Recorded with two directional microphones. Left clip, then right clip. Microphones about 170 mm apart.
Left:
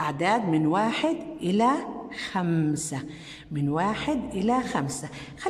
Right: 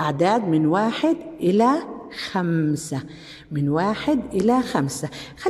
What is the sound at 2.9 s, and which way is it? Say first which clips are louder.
A man's voice: right 4 dB; 15° right (ahead or behind).